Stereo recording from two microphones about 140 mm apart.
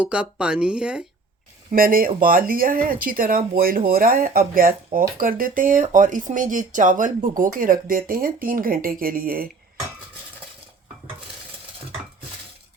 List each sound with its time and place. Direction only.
0.0 s speech: 10° right (ahead or behind)
1.7 s speech: 90° right